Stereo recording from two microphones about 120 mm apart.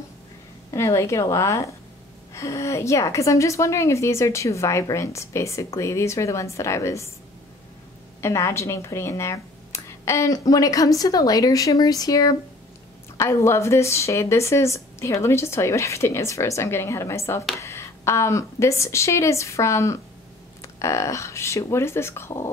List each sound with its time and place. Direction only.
0.7 s a woman's voice: 25° left (ahead or behind)
8.2 s a woman's voice: 25° left (ahead or behind)